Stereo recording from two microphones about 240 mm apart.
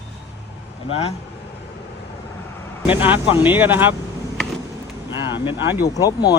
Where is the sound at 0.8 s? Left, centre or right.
Left.